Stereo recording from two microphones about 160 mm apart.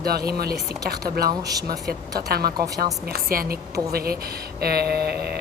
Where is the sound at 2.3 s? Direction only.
75° right (ahead or behind).